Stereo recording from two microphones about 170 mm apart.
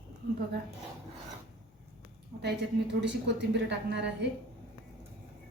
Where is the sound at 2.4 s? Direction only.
90° right.